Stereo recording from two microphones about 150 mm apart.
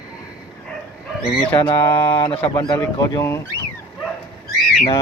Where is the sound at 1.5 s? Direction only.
35° left (ahead or behind).